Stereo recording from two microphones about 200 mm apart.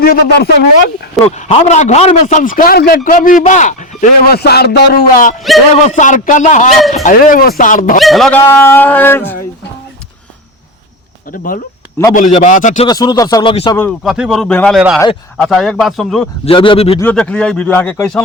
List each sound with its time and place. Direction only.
0.0 s a man's voice: 50° left (ahead or behind)
1.4 s a man's voice: 35° left (ahead or behind)
4.3 s speech: 50° left (ahead or behind)
5.4 s speech: centre (ahead or behind)
5.8 s a man's voice: 40° left (ahead or behind)
7.9 s speech: centre (ahead or behind)
11.3 s a man's voice: 45° left (ahead or behind)
12.9 s speech: 20° left (ahead or behind)
14.0 s speech: centre (ahead or behind)
16.5 s speech: 25° left (ahead or behind)
17.0 s speech: 5° left (ahead or behind)